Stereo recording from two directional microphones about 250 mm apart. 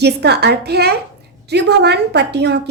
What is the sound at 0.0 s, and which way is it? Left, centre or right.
A woman's voice, right.